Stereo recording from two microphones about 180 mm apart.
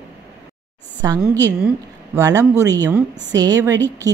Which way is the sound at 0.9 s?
20° right (ahead or behind).